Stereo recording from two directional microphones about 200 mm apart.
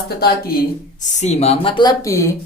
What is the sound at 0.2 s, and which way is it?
Speech, 50° left (ahead or behind).